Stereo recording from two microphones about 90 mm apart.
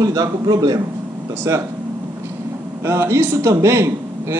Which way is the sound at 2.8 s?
35° right (ahead or behind).